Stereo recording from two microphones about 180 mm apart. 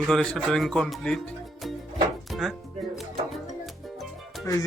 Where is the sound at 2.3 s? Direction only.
Centre (ahead or behind).